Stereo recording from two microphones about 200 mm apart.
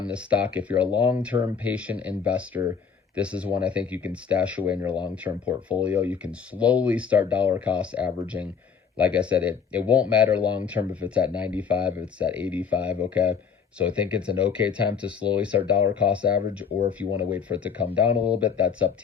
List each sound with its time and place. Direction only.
0.0 s speech: 5° right (ahead or behind)
16.3 s speech: 50° left (ahead or behind)
17.3 s speech: 5° right (ahead or behind)